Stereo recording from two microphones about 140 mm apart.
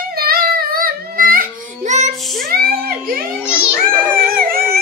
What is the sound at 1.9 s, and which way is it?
Child singing, 75° right (ahead or behind).